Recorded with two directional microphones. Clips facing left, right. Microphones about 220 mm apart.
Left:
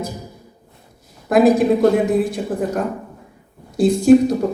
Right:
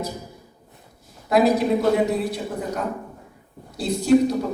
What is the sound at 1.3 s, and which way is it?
Speech, 50° left (ahead or behind).